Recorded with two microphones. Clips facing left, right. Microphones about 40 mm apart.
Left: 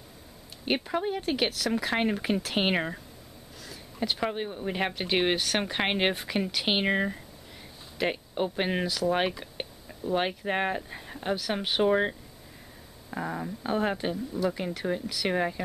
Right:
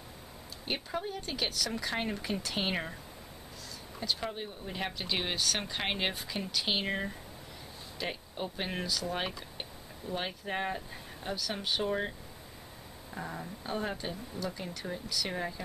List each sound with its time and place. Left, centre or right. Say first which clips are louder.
0.8 s speech: left 8 dB; left
4.1 s speech: left 4 dB; left